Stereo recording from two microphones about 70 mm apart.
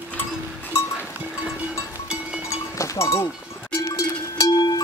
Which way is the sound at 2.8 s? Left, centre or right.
Left.